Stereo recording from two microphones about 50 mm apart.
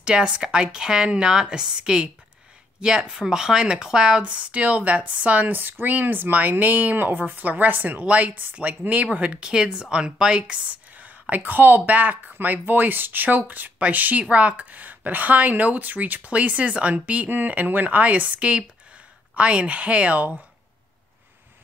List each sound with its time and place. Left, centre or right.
0.0 s speech: centre
4.2 s speech: right
5.5 s a woman's voice: right
8.0 s speech: right
9.5 s speech: centre
11.0 s a woman's voice: right